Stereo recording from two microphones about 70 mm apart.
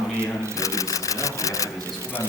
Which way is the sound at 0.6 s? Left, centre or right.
Left.